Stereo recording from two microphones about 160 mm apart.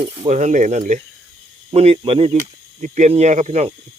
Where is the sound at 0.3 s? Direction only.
45° right (ahead or behind).